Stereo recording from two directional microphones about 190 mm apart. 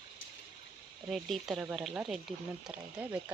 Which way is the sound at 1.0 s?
Centre (ahead or behind).